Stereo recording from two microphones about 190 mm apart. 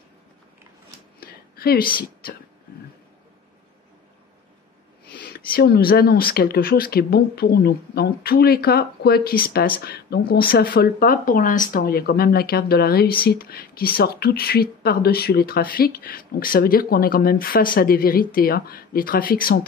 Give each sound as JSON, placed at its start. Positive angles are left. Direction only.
{"t": 1.2, "sound": "a sound", "side_deg": 55}
{"t": 2.2, "sound": "speech", "side_deg": 50}
{"t": 5.1, "sound": "speech", "side_deg": 55}